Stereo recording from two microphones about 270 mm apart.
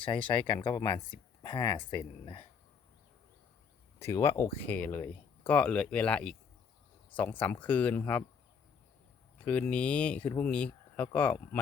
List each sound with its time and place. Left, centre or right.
0.1 s speech: centre
4.0 s speech: centre
9.4 s speech: centre